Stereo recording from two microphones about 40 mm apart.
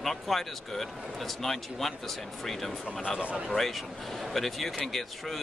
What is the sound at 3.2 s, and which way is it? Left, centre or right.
Speech, right.